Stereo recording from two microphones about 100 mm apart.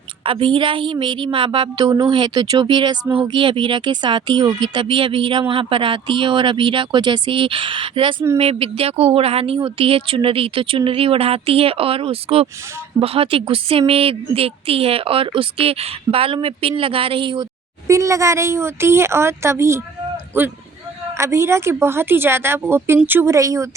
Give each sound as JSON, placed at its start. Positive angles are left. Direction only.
{"t": 0.3, "sound": "a woman's voice", "side_deg": -60}
{"t": 8.4, "sound": "a woman's voice", "side_deg": -75}
{"t": 17.3, "sound": "speech", "side_deg": -30}